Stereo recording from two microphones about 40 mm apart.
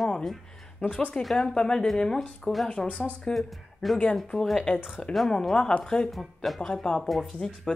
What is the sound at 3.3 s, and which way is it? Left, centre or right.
Speech, centre.